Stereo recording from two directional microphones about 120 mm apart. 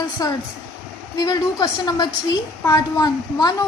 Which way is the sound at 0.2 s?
30° left (ahead or behind).